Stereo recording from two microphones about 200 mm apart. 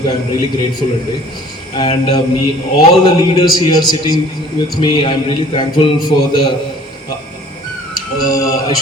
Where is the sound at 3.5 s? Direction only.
20° left (ahead or behind).